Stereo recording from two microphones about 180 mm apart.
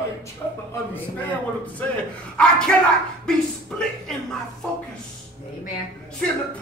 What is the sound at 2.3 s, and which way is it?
A man's voice, 5° left (ahead or behind).